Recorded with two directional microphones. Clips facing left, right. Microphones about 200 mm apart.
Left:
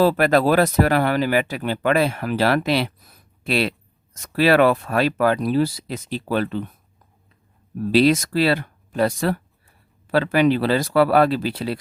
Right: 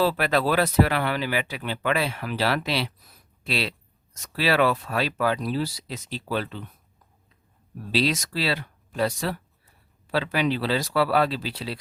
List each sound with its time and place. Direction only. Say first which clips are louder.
0.0 s speech: left 6 dB; 45° left (ahead or behind)
7.9 s speech: left 9 dB; 55° left (ahead or behind)